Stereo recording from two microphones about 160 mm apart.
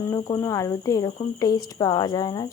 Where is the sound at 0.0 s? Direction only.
20° left (ahead or behind).